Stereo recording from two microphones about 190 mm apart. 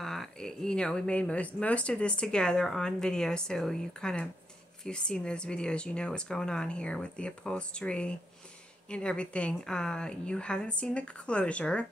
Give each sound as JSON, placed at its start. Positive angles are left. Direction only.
{"t": 0.0, "sound": "speech", "side_deg": 0}